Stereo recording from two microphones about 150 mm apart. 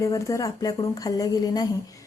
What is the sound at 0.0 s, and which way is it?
Speech, 20° left (ahead or behind).